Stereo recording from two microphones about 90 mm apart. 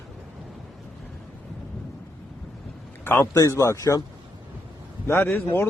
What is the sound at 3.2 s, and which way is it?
Speech, 40° left (ahead or behind).